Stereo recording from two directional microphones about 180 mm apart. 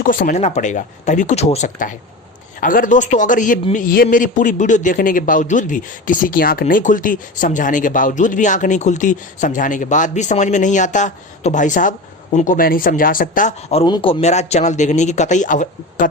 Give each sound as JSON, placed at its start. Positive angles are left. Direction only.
{"t": 0.0, "sound": "a man's voice", "side_deg": 50}
{"t": 13.7, "sound": "a man's voice", "side_deg": 30}